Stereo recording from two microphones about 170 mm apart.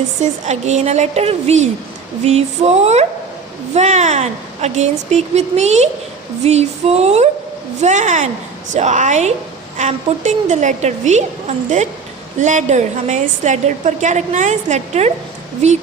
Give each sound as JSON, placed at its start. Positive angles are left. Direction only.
{"t": 0.2, "sound": "a woman's voice", "side_deg": -45}